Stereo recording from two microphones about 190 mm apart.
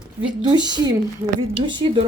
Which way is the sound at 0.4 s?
20° right (ahead or behind).